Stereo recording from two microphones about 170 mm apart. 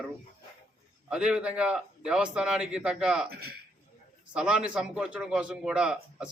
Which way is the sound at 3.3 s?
65° right (ahead or behind).